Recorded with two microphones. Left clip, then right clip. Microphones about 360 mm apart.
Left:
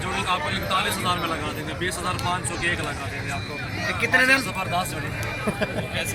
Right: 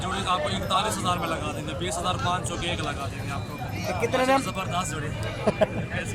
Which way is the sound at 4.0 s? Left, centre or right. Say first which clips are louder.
Left 4 dB; centre.